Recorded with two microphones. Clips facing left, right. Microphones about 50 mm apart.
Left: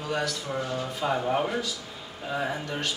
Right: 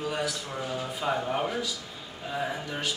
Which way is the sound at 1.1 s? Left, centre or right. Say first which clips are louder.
Left 4 dB; centre.